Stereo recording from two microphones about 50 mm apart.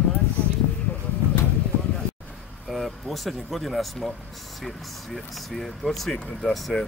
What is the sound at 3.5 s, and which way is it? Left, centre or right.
Speech, centre.